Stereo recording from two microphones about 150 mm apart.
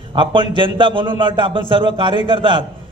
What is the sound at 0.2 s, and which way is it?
A man's voice, 35° right (ahead or behind).